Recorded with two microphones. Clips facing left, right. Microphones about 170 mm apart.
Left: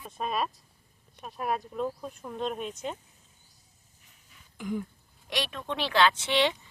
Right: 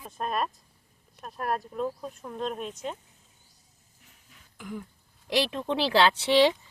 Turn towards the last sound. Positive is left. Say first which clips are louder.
# right 5 dB
turn(degrees=-35)  # may be behind; listen again after turning